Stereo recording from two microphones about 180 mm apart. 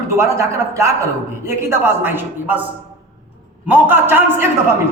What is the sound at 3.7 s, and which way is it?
Speech, 10° right (ahead or behind).